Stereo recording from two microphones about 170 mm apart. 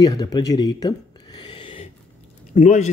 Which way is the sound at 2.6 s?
45° left (ahead or behind).